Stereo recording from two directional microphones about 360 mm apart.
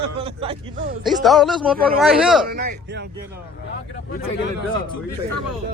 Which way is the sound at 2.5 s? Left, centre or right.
Right.